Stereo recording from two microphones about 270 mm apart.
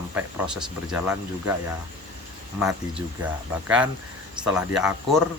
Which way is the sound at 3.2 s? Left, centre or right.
Centre.